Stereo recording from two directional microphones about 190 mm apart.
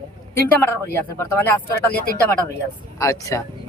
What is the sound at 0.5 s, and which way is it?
Speech, 10° left (ahead or behind).